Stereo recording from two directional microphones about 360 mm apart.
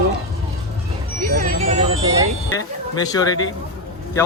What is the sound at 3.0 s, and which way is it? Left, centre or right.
Speech, centre.